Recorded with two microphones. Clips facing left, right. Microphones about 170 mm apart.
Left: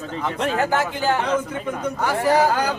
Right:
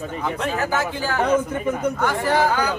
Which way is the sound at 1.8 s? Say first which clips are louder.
Even; 5° left (ahead or behind).